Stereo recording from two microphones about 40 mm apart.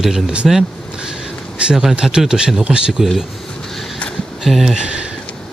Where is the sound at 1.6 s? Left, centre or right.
Right.